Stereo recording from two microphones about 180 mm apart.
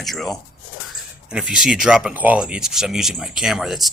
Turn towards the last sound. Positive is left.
turn(degrees=0)  # may be behind; listen again after turning